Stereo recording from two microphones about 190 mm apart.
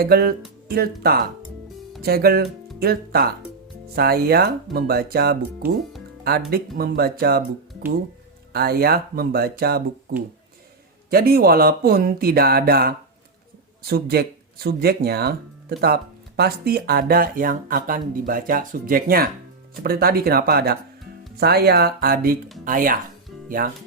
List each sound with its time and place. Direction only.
0.0 s speech: 55° right (ahead or behind)
8.5 s speech: 55° right (ahead or behind)